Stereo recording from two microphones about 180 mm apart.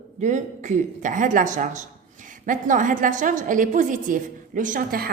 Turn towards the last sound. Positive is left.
turn(degrees=-55)  # may be behind; listen again after turning